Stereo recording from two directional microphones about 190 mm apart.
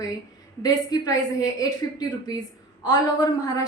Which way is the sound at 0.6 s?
20° left (ahead or behind).